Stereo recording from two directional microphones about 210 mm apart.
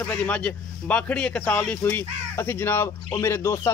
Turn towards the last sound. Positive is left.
turn(degrees=15)  # may be behind; listen again after turning